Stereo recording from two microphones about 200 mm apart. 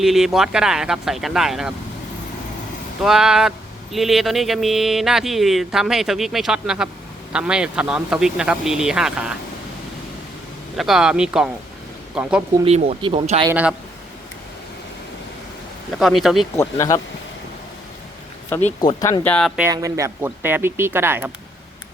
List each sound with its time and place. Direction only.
0.0 s speech: centre (ahead or behind)
3.0 s speech: centre (ahead or behind)
10.8 s speech: centre (ahead or behind)
12.6 s speech: 30° right (ahead or behind)
13.5 s speech: 5° right (ahead or behind)
16.0 s speech: centre (ahead or behind)
16.6 s speech: 15° left (ahead or behind)
18.8 s speech: 20° left (ahead or behind)
19.2 s speech: 5° left (ahead or behind)
19.6 s speech: 15° right (ahead or behind)